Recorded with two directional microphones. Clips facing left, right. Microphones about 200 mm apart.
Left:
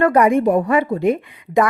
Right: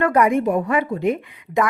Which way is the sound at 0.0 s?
30° left (ahead or behind).